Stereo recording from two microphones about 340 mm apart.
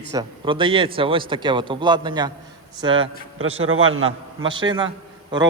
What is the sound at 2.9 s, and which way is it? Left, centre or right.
Speech, right.